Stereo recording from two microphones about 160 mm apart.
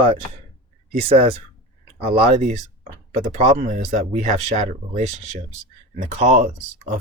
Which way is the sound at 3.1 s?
45° right (ahead or behind).